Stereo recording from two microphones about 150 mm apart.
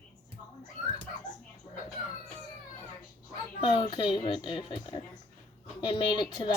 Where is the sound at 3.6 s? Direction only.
30° left (ahead or behind).